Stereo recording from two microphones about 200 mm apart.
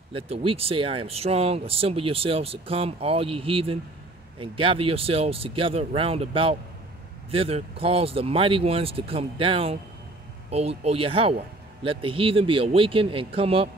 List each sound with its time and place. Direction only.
0.1 s speech: 25° right (ahead or behind)